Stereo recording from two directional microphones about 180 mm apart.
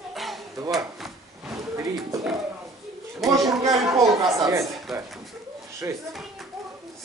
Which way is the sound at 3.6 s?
20° right (ahead or behind).